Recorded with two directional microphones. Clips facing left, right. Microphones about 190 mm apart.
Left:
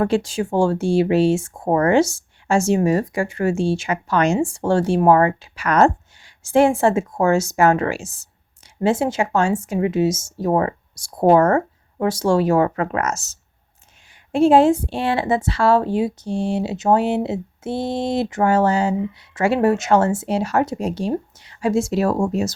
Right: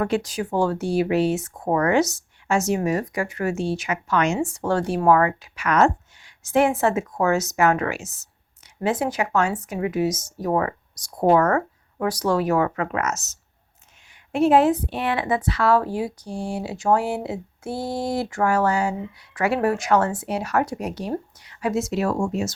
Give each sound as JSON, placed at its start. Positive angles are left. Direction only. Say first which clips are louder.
{"t": 0.0, "sound": "a woman's voice", "louder": "left 4 dB", "side_deg": 30}